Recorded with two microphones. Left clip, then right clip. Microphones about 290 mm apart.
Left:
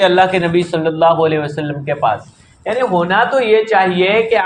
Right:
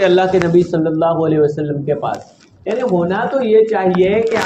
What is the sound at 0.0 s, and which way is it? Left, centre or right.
A man's voice, left.